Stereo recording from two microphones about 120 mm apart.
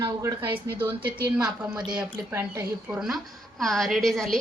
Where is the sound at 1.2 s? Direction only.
10° right (ahead or behind).